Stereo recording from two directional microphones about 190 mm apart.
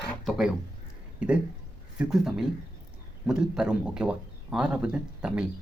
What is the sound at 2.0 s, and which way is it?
A man's voice, 5° right (ahead or behind).